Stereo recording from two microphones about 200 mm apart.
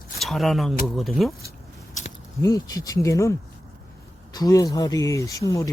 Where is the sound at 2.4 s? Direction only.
15° left (ahead or behind).